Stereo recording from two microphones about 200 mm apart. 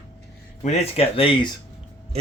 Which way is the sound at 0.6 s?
30° left (ahead or behind).